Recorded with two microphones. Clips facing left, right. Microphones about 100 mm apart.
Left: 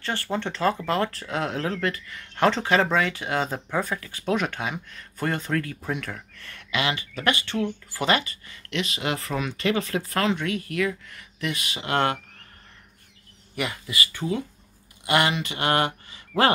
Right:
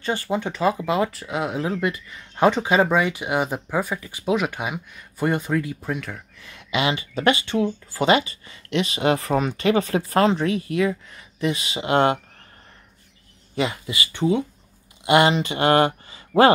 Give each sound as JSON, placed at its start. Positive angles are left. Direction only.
{"t": 0.0, "sound": "speech", "side_deg": -15}
{"t": 5.9, "sound": "speech", "side_deg": 0}
{"t": 6.7, "sound": "speech", "side_deg": -25}
{"t": 13.6, "sound": "speech", "side_deg": -25}